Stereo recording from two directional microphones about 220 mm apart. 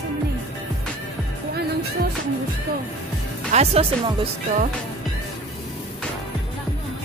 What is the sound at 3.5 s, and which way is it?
Speech, 30° right (ahead or behind).